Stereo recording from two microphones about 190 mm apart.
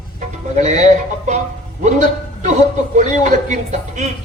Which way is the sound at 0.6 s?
40° right (ahead or behind).